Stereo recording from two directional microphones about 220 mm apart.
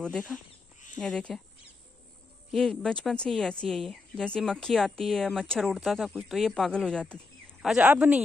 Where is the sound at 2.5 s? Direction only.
Centre (ahead or behind).